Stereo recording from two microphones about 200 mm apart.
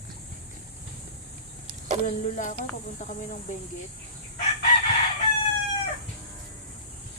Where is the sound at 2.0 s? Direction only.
40° left (ahead or behind).